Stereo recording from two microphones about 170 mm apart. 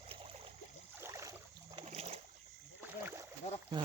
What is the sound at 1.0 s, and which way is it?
Boat, 20° right (ahead or behind).